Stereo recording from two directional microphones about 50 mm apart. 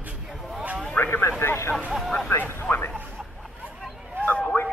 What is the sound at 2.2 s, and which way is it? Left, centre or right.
Vehicle, left.